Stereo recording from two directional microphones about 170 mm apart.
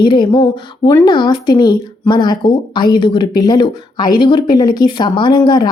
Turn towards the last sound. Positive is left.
turn(degrees=25)  # may be behind; listen again after turning